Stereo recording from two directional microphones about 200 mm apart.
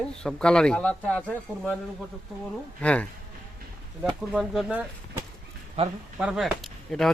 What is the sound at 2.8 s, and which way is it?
Speech, 5° left (ahead or behind).